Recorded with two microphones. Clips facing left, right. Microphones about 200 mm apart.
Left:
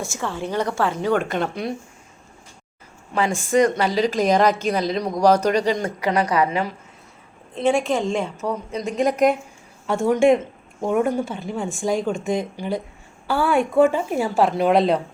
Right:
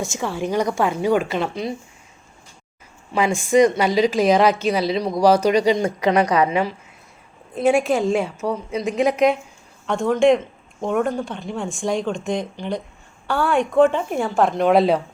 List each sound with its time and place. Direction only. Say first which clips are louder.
0.0 s a woman's voice: right 3 dB; 15° right (ahead or behind)
3.2 s a woman's voice: right 3 dB; 10° right (ahead or behind)
5.8 s a woman's voice: right 4 dB; 25° right (ahead or behind)
7.5 s a woman's voice: right 2 dB; 5° right (ahead or behind)